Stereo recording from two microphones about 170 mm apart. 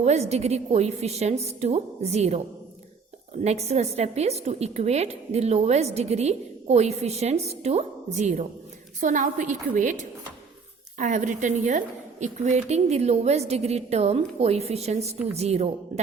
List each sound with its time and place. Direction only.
0.0 s a woman's voice: 40° right (ahead or behind)
3.4 s a woman's voice: 40° right (ahead or behind)